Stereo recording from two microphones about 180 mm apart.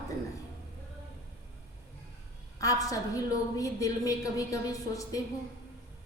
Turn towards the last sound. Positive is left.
turn(degrees=20)  # may be behind; listen again after turning